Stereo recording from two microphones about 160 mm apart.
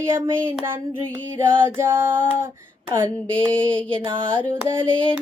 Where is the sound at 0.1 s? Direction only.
15° right (ahead or behind).